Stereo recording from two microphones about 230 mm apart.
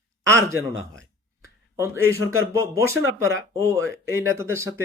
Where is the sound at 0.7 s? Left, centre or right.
Right.